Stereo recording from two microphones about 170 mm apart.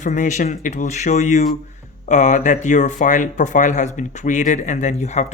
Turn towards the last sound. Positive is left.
turn(degrees=40)  # may be behind; listen again after turning